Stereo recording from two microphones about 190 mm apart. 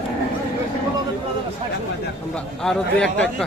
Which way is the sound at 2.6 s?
5° left (ahead or behind).